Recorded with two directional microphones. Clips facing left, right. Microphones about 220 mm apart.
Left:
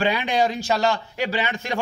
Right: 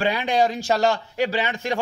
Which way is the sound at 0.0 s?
40° right (ahead or behind).